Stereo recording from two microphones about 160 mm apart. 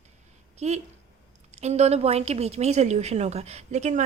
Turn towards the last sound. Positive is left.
turn(degrees=-45)  # may be behind; listen again after turning